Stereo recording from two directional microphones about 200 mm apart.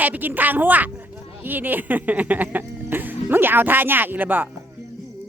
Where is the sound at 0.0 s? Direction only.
10° right (ahead or behind).